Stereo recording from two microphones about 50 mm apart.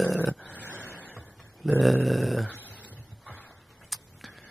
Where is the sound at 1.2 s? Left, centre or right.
Centre.